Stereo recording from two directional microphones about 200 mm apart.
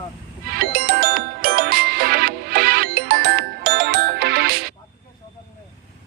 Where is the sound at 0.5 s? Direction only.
50° right (ahead or behind).